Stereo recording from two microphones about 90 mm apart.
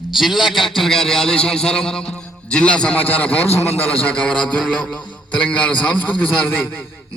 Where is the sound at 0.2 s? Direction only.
5° right (ahead or behind); by 4.1 s 25° left (ahead or behind).